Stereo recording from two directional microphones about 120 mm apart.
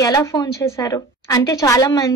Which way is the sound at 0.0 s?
30° left (ahead or behind).